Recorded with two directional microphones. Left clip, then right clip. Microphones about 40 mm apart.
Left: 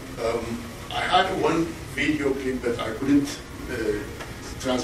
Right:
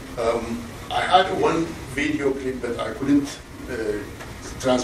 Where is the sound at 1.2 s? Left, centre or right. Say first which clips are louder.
Right 2 dB; centre.